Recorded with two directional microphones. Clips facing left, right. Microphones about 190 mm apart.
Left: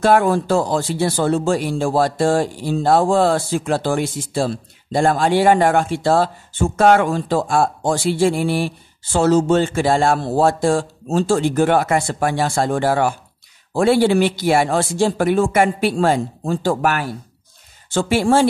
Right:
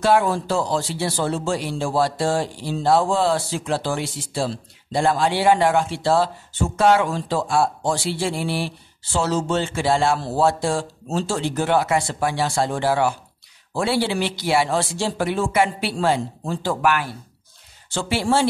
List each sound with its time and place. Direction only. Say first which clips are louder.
0.0 s speech: left 4 dB; 50° left (ahead or behind)